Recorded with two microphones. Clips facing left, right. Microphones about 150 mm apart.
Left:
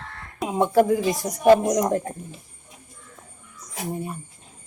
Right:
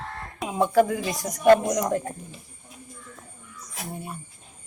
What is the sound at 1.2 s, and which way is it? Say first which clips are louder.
Speech: even; 5° left (ahead or behind).